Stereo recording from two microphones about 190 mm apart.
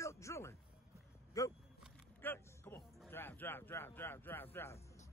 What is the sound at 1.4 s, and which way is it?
Vehicle, 15° left (ahead or behind).